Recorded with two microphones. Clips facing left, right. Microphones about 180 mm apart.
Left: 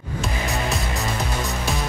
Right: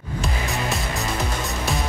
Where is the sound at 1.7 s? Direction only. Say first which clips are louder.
Right 2 dB; centre (ahead or behind).